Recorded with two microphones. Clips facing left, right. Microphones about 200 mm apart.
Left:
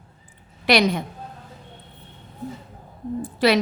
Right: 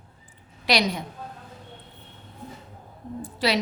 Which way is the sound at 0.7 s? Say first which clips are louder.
Left 5 dB; 55° left (ahead or behind).